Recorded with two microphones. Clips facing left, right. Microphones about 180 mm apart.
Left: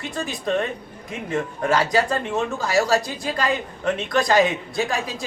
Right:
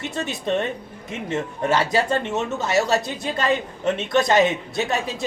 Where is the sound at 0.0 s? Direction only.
25° right (ahead or behind).